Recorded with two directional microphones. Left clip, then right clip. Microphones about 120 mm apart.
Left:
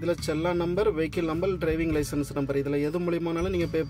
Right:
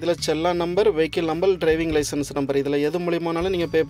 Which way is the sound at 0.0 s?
20° right (ahead or behind).